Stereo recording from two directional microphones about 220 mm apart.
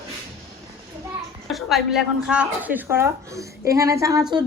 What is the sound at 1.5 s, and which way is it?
Speech, centre (ahead or behind).